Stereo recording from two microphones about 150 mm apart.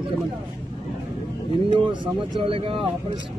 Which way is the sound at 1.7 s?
35° right (ahead or behind).